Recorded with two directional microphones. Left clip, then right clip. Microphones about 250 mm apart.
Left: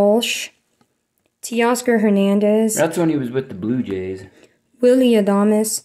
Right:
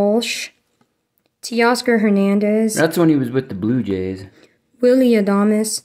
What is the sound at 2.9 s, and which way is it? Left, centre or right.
Speech, right.